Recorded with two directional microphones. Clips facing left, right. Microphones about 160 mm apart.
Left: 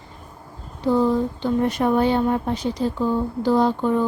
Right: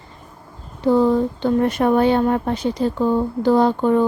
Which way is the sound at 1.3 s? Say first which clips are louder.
Right 3 dB; 55° right (ahead or behind).